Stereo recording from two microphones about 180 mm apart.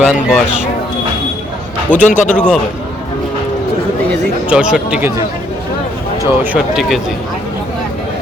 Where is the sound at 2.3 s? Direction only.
5° left (ahead or behind).